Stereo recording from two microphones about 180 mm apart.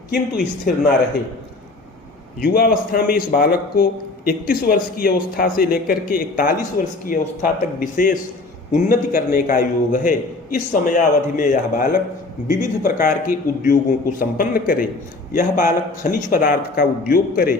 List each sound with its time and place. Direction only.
0.1 s speech: 60° left (ahead or behind)
2.4 s speech: 55° left (ahead or behind)